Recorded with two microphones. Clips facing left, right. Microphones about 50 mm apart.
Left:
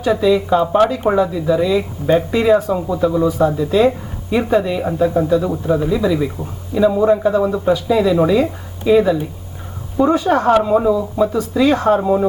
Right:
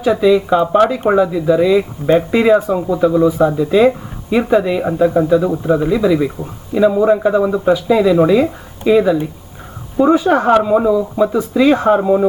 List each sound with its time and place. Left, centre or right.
0.0 s speech: centre
11.3 s speech: right
12.0 s speech: centre